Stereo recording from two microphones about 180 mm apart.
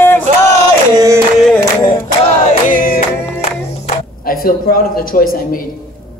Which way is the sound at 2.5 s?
50° left (ahead or behind).